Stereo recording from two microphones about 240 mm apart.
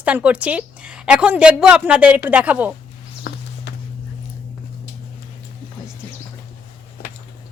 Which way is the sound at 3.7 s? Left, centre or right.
Left.